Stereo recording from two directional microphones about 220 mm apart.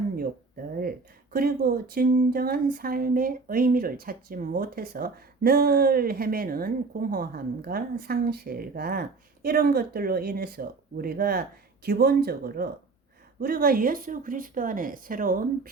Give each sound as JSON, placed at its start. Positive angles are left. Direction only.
{"t": 0.8, "sound": "a woman's voice", "side_deg": -45}